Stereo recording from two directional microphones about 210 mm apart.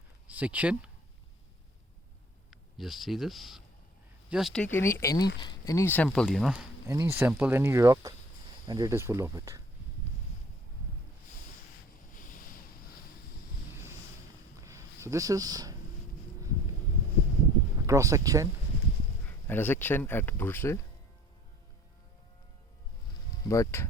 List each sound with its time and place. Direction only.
0.3 s speech: 5° right (ahead or behind)
2.5 s speech: centre (ahead or behind)
6.8 s speech: 15° right (ahead or behind)
14.6 s a sound: 15° right (ahead or behind)
17.8 s speech: 15° right (ahead or behind)
19.3 s speech: 10° left (ahead or behind)
23.4 s speech: 15° left (ahead or behind)